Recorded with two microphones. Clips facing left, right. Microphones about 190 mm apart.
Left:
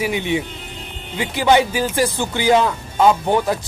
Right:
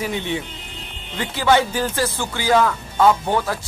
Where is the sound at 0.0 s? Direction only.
10° left (ahead or behind).